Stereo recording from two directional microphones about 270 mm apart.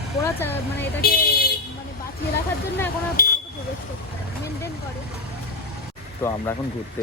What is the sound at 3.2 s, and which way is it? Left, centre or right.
Speech, left.